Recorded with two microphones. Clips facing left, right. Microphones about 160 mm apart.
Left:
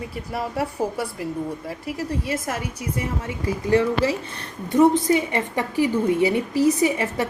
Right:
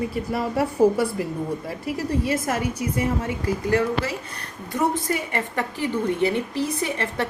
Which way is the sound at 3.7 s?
25° left (ahead or behind).